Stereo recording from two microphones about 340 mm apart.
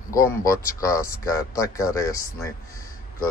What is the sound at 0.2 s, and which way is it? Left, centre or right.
Speech, centre.